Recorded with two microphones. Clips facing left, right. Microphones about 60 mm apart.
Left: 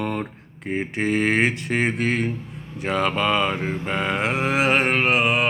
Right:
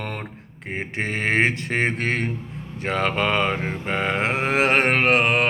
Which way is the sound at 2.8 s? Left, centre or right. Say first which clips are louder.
Left 1 dB; right.